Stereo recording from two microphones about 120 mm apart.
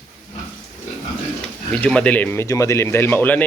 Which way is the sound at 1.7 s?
5° left (ahead or behind).